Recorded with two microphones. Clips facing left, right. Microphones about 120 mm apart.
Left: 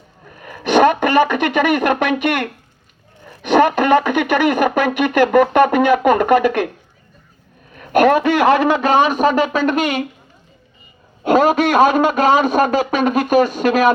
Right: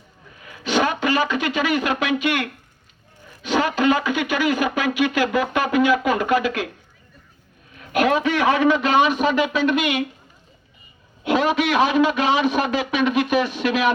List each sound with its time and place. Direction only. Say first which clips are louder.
0.3 s speech: left 7 dB; 55° left (ahead or behind)
7.8 s a man's voice: left 6 dB; 55° left (ahead or behind)
8.7 s speech: left 4 dB; 45° left (ahead or behind)
11.2 s speech: left 6 dB; 45° left (ahead or behind)